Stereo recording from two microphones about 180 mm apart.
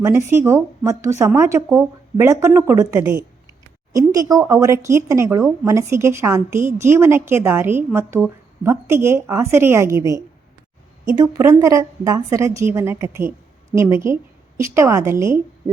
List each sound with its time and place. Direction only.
0.0 s speech: 15° right (ahead or behind)